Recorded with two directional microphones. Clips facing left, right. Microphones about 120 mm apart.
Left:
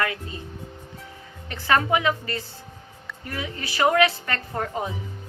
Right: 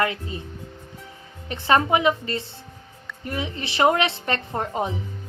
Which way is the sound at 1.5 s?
20° right (ahead or behind).